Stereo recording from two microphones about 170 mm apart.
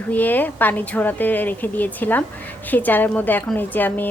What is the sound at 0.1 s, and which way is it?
Speech, 10° left (ahead or behind).